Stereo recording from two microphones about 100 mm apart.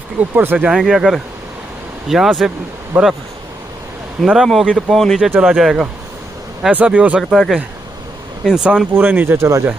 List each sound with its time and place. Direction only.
0.2 s speech: 15° right (ahead or behind)
2.9 s speech: 15° right (ahead or behind)
4.2 s speech: centre (ahead or behind)
6.7 s speech: 15° right (ahead or behind)
7.2 s speech: centre (ahead or behind)
8.9 s speech: 20° right (ahead or behind)